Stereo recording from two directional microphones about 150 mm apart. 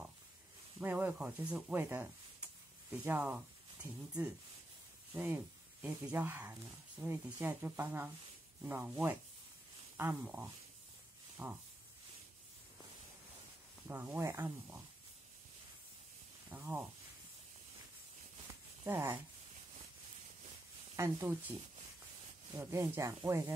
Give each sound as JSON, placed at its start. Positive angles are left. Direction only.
{"t": 0.7, "sound": "speech", "side_deg": -10}
{"t": 13.8, "sound": "speech", "side_deg": -15}
{"t": 16.4, "sound": "speech", "side_deg": -10}
{"t": 18.9, "sound": "speech", "side_deg": -15}
{"t": 20.9, "sound": "speech", "side_deg": -15}
{"t": 22.6, "sound": "speech", "side_deg": -20}